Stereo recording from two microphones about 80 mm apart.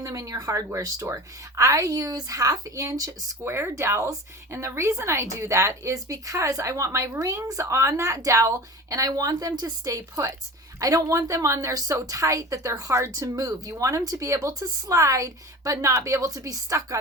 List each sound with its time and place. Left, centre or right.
0.0 s speech: right
3.4 s a woman's voice: right